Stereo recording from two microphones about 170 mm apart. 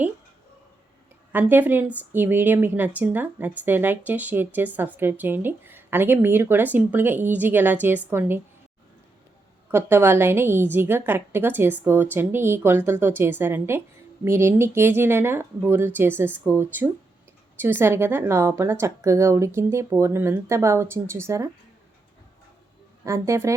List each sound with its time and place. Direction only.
1.3 s a woman's voice: 10° right (ahead or behind)
9.7 s a woman's voice: 15° right (ahead or behind)
23.0 s a woman's voice: 15° right (ahead or behind)